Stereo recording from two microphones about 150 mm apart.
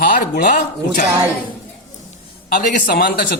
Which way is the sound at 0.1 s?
65° left (ahead or behind).